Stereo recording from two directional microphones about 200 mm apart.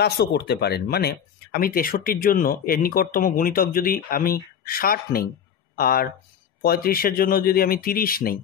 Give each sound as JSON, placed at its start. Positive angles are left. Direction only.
{"t": 0.0, "sound": "speech", "side_deg": 55}